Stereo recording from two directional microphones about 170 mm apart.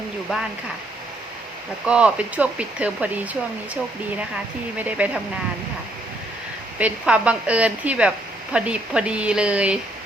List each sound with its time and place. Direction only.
1.9 s a woman's voice: 5° right (ahead or behind)
4.8 s a woman's voice: 10° right (ahead or behind)
6.7 s a woman's voice: 5° right (ahead or behind)